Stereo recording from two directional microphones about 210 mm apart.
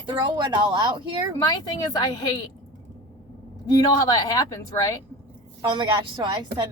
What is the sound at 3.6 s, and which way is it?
A woman's voice, 20° left (ahead or behind).